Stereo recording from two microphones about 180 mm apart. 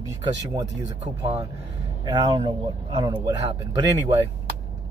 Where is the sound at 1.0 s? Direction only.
35° right (ahead or behind).